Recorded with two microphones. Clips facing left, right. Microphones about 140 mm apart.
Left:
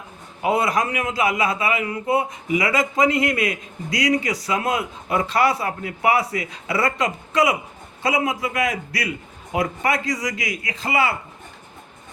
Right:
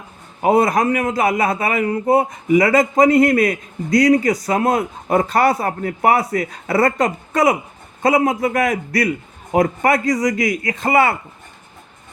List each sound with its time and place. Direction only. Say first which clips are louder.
0.4 s a man's voice: right 6 dB; 50° right (ahead or behind)